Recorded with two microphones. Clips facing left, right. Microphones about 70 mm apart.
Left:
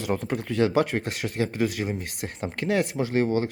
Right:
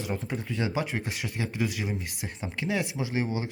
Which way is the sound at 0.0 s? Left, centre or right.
Left.